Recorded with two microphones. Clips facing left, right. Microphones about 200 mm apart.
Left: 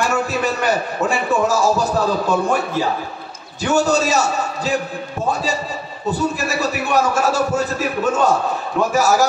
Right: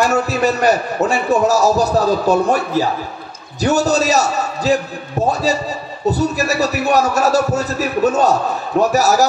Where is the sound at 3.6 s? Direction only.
40° right (ahead or behind).